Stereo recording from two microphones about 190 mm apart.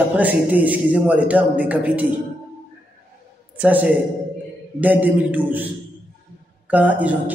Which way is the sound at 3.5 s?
10° right (ahead or behind).